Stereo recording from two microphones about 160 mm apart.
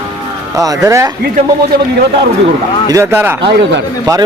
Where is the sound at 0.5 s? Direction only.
20° right (ahead or behind).